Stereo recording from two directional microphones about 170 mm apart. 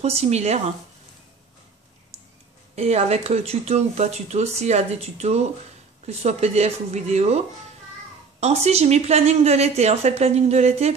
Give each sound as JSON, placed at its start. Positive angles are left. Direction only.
{"t": 0.0, "sound": "speech", "side_deg": -40}
{"t": 2.7, "sound": "speech", "side_deg": -40}